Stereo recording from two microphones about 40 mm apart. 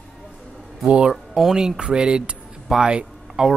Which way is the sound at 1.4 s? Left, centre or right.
Centre.